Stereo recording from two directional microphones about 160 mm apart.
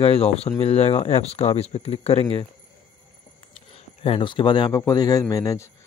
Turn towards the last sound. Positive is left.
turn(degrees=20)  # may be behind; listen again after turning